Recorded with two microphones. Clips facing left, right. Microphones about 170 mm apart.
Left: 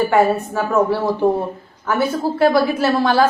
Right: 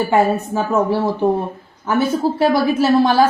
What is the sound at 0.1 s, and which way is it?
Speech, 20° right (ahead or behind).